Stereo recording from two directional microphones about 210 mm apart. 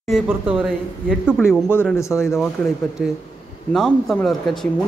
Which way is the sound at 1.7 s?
10° left (ahead or behind).